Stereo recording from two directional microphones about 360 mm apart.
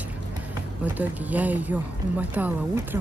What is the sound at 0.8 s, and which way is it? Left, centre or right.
Speech, centre.